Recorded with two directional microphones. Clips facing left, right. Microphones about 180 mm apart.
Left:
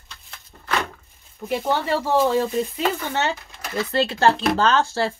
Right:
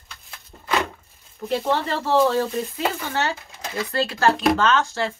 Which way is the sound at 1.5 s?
5° left (ahead or behind).